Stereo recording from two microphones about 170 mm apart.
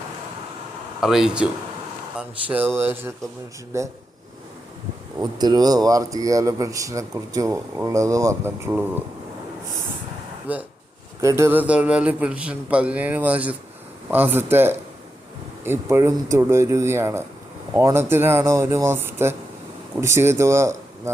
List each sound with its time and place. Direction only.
1.0 s a man's voice: 5° right (ahead or behind)
5.2 s speech: 25° right (ahead or behind)
10.5 s a man's voice: 10° right (ahead or behind)